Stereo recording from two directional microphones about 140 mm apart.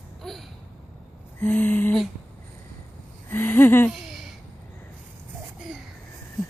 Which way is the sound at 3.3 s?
15° left (ahead or behind).